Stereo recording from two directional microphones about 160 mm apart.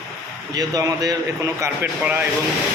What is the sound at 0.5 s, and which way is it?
Speech, 25° right (ahead or behind).